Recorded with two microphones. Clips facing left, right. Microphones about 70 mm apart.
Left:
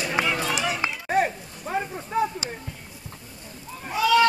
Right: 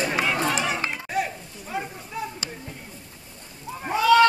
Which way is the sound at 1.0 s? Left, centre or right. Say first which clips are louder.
Left 4 dB; left.